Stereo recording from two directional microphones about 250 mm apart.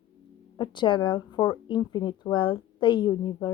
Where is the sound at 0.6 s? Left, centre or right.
Centre.